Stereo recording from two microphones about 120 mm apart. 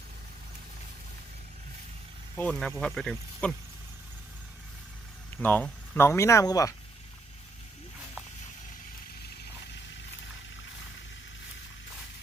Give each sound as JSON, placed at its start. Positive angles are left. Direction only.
{"t": 2.3, "sound": "speech", "side_deg": 10}
{"t": 5.4, "sound": "speech", "side_deg": 15}
{"t": 6.0, "sound": "speech", "side_deg": 25}